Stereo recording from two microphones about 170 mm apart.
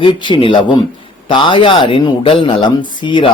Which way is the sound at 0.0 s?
30° left (ahead or behind).